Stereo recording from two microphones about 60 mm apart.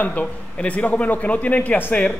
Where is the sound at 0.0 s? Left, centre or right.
Left.